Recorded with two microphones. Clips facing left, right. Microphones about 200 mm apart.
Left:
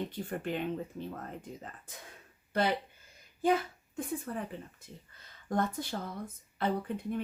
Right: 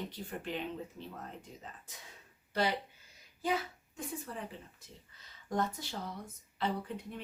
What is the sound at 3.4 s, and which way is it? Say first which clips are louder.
Speech: left 6 dB; 55° left (ahead or behind).